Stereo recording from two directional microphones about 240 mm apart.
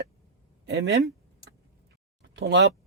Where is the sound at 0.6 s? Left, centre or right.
Right.